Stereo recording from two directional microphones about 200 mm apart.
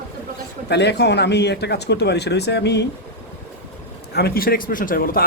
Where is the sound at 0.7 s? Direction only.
60° left (ahead or behind).